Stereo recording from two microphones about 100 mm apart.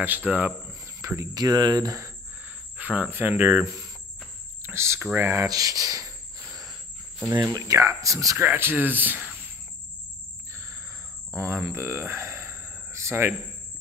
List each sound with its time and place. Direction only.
0.0 s speech: 15° right (ahead or behind)
1.0 s speech: 30° right (ahead or behind)
2.4 s speech: 15° right (ahead or behind)
4.6 s speech: 25° right (ahead or behind)
6.5 s cricket: centre (ahead or behind)
7.4 s speech: 35° right (ahead or behind)
8.4 s speech: 20° right (ahead or behind)
11.3 s a sound: 30° right (ahead or behind)